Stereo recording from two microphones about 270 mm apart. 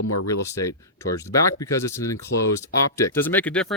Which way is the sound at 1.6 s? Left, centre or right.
Centre.